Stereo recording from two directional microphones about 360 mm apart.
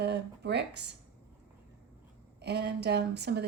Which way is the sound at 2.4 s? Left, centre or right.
Right.